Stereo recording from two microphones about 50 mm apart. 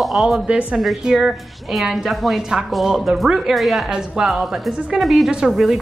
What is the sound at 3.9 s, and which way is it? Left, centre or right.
A woman's voice, centre.